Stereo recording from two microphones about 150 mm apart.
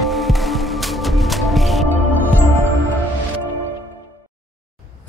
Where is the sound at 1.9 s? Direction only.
10° left (ahead or behind).